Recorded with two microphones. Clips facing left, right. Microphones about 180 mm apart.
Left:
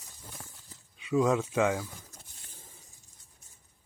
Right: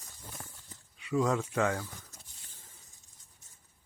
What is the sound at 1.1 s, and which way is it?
Speech, 15° left (ahead or behind).